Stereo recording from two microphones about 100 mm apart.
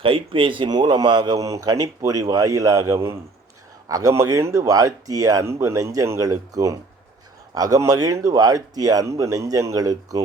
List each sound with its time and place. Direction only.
0.0 s speech: 60° right (ahead or behind)
1.5 s speech: 30° right (ahead or behind)